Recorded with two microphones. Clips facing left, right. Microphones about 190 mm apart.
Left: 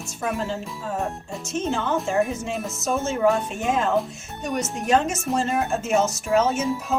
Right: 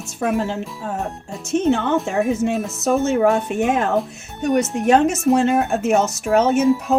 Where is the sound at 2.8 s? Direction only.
60° right (ahead or behind).